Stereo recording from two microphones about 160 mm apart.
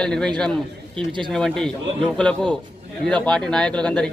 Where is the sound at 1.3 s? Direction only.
5° left (ahead or behind).